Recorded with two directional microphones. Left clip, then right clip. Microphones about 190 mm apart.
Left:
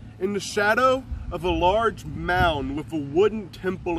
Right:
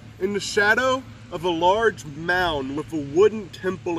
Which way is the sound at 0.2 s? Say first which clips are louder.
Right 2 dB; 10° left (ahead or behind).